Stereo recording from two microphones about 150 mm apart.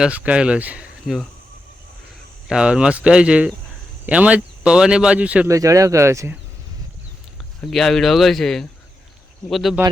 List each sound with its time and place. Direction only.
0.0 s speech: 10° right (ahead or behind)
2.5 s speech: 5° right (ahead or behind)
5.5 s speech: 20° right (ahead or behind)
7.6 s speech: centre (ahead or behind)